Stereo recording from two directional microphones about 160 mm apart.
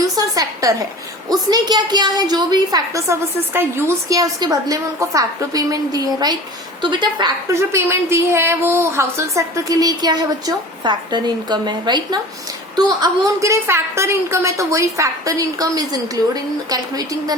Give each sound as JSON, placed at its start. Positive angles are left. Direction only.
{"t": 0.0, "sound": "a sound", "side_deg": -20}
{"t": 1.3, "sound": "a woman's voice", "side_deg": -25}
{"t": 7.5, "sound": "a woman's voice", "side_deg": -15}